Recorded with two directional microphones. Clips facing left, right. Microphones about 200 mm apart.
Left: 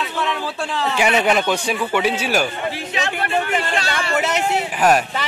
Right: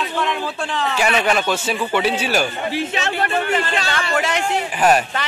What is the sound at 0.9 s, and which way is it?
Speech, 15° left (ahead or behind).